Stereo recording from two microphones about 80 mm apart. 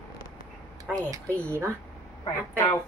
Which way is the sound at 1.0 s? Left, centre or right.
Right.